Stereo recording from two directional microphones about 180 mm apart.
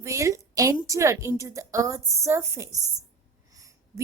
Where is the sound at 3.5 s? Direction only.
20° right (ahead or behind).